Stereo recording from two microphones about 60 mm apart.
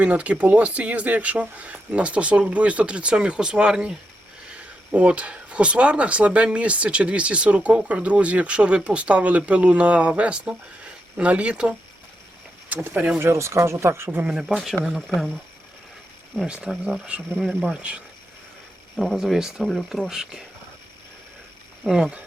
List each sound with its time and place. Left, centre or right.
0.0 s speech: right
12.6 s speech: right
13.1 s speech: right
14.3 s speech: centre
14.9 s speech: centre
16.5 s speech: centre
18.9 s speech: centre
19.6 s speech: centre
20.1 s speech: centre
21.8 s speech: centre